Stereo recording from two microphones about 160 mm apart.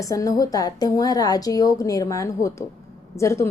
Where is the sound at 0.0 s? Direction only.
20° left (ahead or behind).